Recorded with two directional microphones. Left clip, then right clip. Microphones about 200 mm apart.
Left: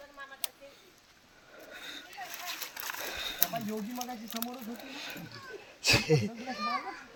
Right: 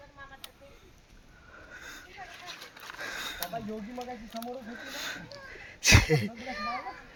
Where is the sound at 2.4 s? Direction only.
60° left (ahead or behind).